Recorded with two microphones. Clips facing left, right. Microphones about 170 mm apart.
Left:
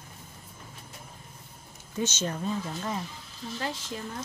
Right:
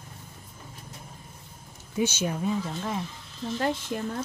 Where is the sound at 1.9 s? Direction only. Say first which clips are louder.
Right 3 dB; 10° right (ahead or behind).